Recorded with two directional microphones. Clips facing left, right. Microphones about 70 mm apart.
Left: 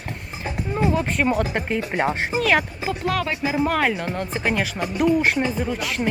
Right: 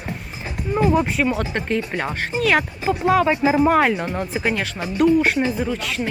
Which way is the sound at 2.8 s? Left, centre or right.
Centre.